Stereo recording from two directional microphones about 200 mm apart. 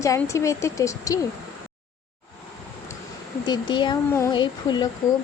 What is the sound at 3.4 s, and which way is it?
Speech, 20° left (ahead or behind).